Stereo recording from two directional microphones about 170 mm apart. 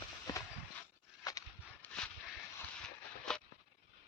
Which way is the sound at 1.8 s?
5° left (ahead or behind).